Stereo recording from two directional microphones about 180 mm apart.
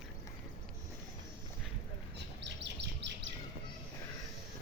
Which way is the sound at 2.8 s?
75° right (ahead or behind).